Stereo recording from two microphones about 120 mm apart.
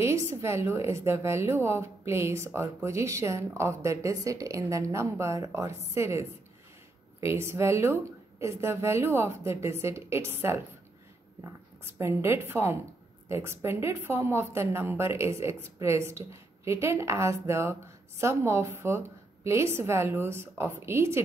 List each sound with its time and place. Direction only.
0.0 s a woman's voice: 25° right (ahead or behind)